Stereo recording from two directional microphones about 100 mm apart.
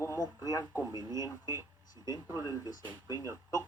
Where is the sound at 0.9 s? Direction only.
30° right (ahead or behind).